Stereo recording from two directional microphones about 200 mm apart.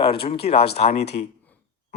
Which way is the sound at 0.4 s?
30° left (ahead or behind).